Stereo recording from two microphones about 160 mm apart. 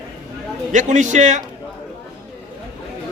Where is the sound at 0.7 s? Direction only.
50° right (ahead or behind).